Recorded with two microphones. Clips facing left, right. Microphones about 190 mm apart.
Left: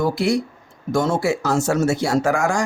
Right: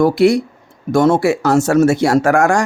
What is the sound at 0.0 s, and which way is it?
Speech, 70° right (ahead or behind).